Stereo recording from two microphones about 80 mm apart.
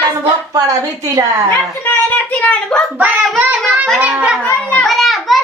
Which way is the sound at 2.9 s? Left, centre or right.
Centre.